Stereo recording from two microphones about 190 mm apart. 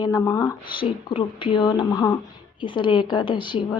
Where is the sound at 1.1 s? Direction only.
25° left (ahead or behind).